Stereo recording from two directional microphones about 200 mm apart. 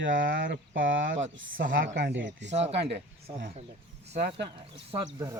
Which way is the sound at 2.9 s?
35° right (ahead or behind).